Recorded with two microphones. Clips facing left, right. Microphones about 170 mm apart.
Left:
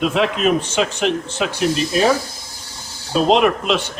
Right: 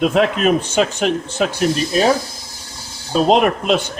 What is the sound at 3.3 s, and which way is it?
Speech, 45° right (ahead or behind).